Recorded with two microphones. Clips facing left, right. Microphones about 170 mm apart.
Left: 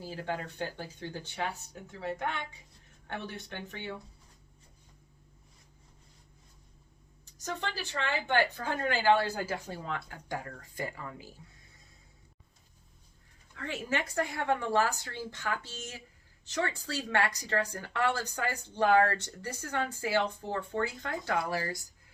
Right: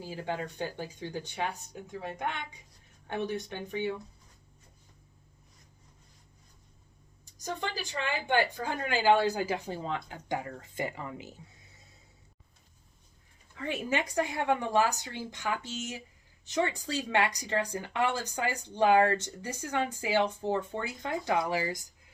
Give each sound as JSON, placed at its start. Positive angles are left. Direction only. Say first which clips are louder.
{"t": 0.0, "sound": "speech", "louder": "right 1 dB", "side_deg": -15}
{"t": 7.3, "sound": "speech", "louder": "right 1 dB", "side_deg": -15}
{"t": 13.6, "sound": "speech", "louder": "right 3 dB", "side_deg": -15}